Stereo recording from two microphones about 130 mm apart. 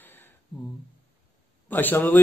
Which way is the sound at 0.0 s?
15° left (ahead or behind).